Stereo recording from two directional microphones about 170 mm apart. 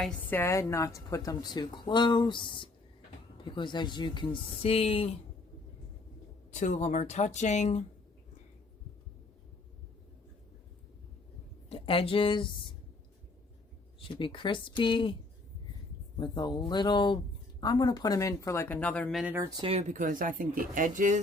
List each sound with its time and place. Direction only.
0.0 s a woman's voice: 10° left (ahead or behind); by 5.1 s 35° left (ahead or behind)
6.5 s speech: 45° left (ahead or behind)
11.7 s a woman's voice: 35° left (ahead or behind)
14.0 s a woman's voice: 30° left (ahead or behind)
16.1 s a woman's voice: 25° left (ahead or behind); by 19.2 s 10° left (ahead or behind)
19.2 s speech: 15° right (ahead or behind)
19.6 s speech: 35° right (ahead or behind)
20.0 s speech: 50° right (ahead or behind)